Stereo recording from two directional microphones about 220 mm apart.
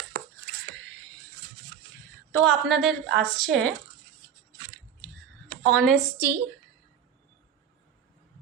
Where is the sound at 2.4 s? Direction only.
Centre (ahead or behind).